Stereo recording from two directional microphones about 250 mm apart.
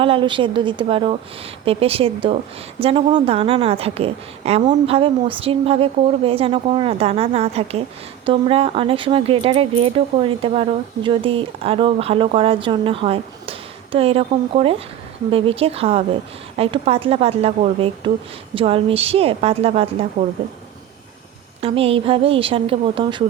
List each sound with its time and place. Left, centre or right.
0.0 s speech: right
21.6 s speech: right